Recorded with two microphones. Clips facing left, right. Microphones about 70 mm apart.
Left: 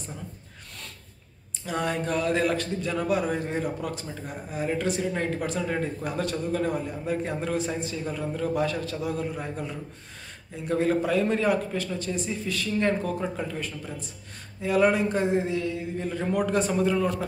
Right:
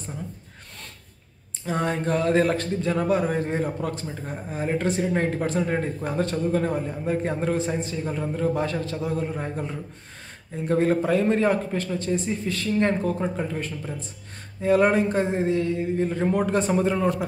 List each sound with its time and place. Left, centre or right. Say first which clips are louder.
1.7 s a man's voice: right 3 dB; right